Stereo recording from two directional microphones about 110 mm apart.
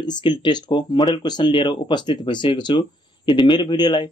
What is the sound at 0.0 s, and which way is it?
Speech, 45° left (ahead or behind).